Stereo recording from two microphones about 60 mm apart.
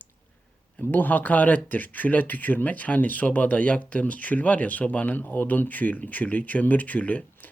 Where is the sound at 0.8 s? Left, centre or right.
Left.